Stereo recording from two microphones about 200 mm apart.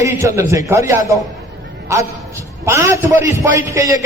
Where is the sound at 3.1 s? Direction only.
40° left (ahead or behind).